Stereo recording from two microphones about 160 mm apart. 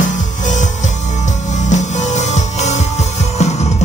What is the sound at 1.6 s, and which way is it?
Music, 45° left (ahead or behind).